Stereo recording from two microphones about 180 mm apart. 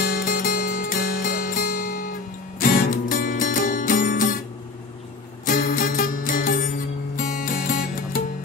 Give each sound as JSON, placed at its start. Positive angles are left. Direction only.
{"t": 0.0, "sound": "music", "side_deg": 50}
{"t": 5.4, "sound": "music", "side_deg": 50}